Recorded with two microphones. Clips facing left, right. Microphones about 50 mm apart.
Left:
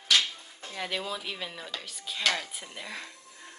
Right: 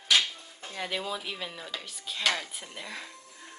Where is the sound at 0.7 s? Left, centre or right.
Centre.